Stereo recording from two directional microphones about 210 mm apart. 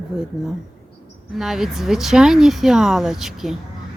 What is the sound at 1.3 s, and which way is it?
Speech, centre (ahead or behind).